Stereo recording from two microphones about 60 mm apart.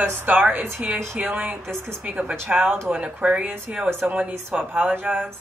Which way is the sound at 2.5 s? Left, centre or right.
Centre.